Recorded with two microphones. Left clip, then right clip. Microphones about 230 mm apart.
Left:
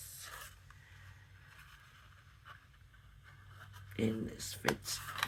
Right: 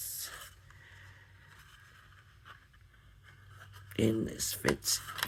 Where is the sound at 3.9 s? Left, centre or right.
Right.